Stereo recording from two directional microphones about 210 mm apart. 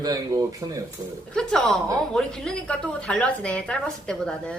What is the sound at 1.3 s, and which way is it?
A woman's voice, 5° left (ahead or behind).